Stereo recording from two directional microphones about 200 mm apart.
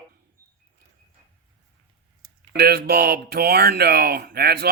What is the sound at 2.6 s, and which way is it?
Speech, 50° right (ahead or behind).